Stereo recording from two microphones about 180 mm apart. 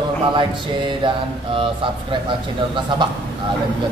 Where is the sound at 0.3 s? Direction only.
25° right (ahead or behind).